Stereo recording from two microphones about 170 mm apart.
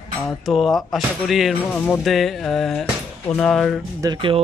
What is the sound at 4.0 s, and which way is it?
Speech, 25° right (ahead or behind).